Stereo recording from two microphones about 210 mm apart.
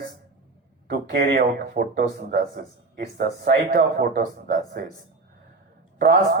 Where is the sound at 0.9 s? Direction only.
50° right (ahead or behind).